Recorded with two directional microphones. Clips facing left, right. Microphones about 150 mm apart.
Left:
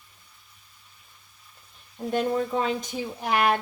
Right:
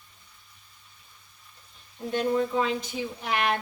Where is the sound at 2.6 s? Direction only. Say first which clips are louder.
Left 1 dB; 45° left (ahead or behind).